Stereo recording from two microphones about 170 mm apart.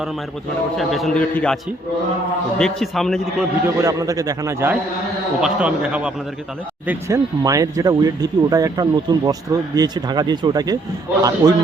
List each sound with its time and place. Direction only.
0.8 s a man's voice: centre (ahead or behind)
2.6 s a man's voice: 5° left (ahead or behind)
3.8 s speech: 20° right (ahead or behind)
6.8 s speech: 20° right (ahead or behind)